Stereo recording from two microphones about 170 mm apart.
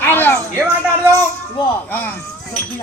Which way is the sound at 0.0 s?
10° left (ahead or behind).